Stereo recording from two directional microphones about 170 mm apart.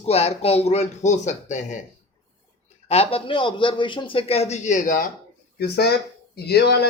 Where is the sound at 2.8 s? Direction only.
35° left (ahead or behind); by 5.1 s 50° left (ahead or behind).